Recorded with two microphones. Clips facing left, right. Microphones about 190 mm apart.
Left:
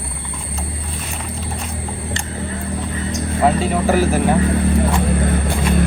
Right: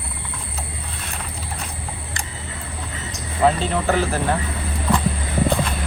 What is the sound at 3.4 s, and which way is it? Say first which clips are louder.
Speech: left 2 dB; 5° left (ahead or behind).